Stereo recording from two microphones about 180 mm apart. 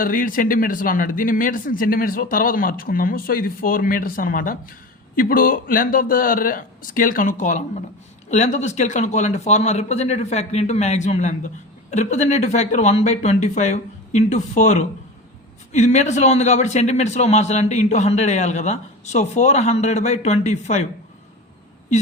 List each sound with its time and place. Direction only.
0.0 s speech: 50° left (ahead or behind)